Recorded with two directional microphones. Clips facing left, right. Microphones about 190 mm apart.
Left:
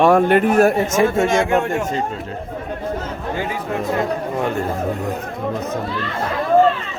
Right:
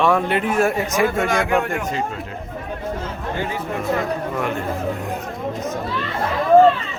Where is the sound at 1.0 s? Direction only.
25° left (ahead or behind).